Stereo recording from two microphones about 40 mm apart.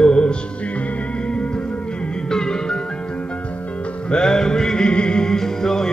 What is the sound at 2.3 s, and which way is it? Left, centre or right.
Music, centre.